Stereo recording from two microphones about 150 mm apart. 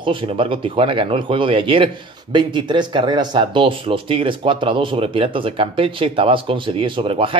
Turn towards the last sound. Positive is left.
turn(degrees=-35)  # may be behind; listen again after turning